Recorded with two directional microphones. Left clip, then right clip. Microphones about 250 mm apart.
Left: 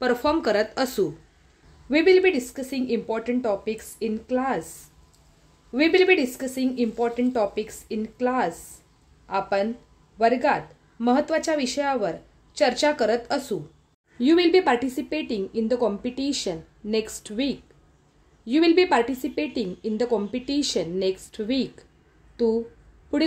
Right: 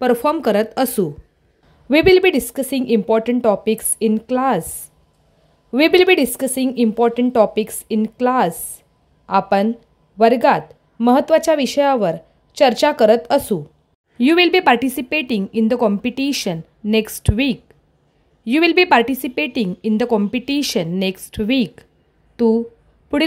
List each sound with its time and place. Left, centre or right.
0.0 s a woman's voice: right
23.1 s a woman's voice: right